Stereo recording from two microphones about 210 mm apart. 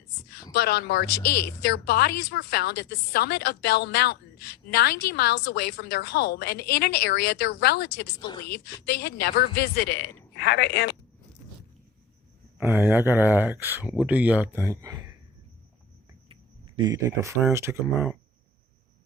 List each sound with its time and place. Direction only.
0.5 s a woman's voice: 50° left (ahead or behind)
8.3 s a woman's voice: 20° left (ahead or behind)
8.6 s a woman's voice: 50° left (ahead or behind)
12.5 s speech: 10° right (ahead or behind)
16.3 s speech: 20° right (ahead or behind); by 18.2 s 5° right (ahead or behind)